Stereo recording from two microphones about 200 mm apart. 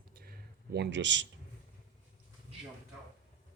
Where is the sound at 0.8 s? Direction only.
65° right (ahead or behind).